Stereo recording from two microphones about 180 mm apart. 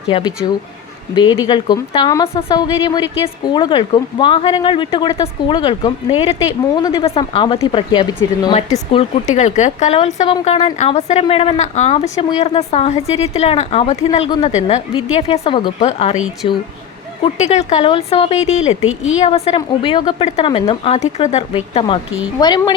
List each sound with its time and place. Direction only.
0.1 s a woman's voice: 25° left (ahead or behind)
8.9 s speech: 35° left (ahead or behind)
16.1 s speech: 5° right (ahead or behind)
17.2 s a woman's voice: 40° left (ahead or behind)